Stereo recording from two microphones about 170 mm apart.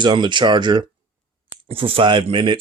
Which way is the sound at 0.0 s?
25° right (ahead or behind).